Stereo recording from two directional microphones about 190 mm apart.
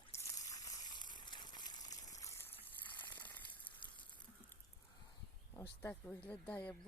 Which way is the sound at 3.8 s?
25° left (ahead or behind).